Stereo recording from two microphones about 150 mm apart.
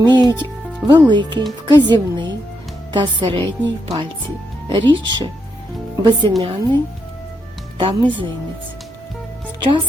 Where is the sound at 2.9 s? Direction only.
30° right (ahead or behind).